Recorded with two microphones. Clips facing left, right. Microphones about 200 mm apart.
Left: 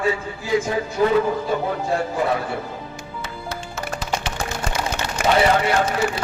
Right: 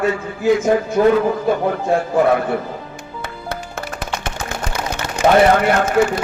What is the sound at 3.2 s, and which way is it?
Music, 55° right (ahead or behind).